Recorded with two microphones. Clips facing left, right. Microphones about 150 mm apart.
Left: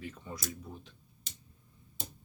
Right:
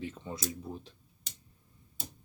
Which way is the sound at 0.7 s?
35° right (ahead or behind).